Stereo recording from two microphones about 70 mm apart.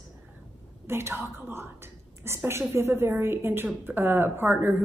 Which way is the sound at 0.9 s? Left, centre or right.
Right.